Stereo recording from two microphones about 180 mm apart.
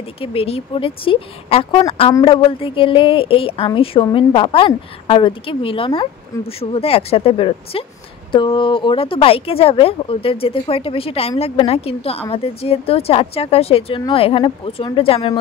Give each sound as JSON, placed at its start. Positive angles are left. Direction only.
{"t": 0.2, "sound": "a woman's voice", "side_deg": 30}